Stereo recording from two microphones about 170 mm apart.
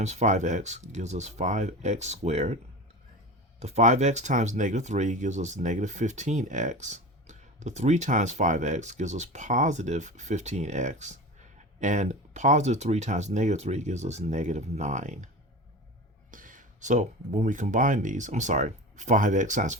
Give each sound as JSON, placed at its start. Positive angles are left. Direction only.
{"t": 0.0, "sound": "speech", "side_deg": -40}
{"t": 3.6, "sound": "speech", "side_deg": -40}
{"t": 16.3, "sound": "speech", "side_deg": -50}